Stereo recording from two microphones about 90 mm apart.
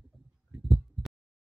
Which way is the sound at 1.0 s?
Centre (ahead or behind).